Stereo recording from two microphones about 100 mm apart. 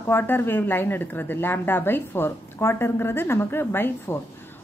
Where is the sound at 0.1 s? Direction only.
20° left (ahead or behind).